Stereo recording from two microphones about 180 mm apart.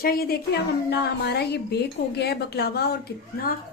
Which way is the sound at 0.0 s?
55° left (ahead or behind).